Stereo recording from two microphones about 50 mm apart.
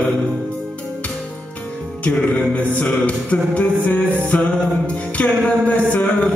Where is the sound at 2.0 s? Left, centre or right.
Left.